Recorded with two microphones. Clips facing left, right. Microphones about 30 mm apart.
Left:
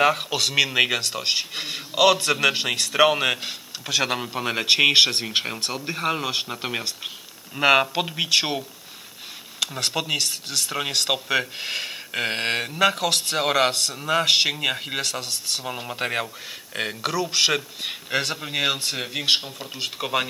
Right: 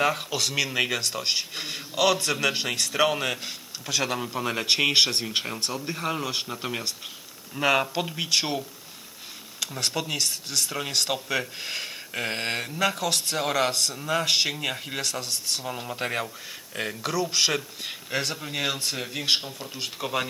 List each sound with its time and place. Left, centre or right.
0.0 s speech: left
17.1 s speech: centre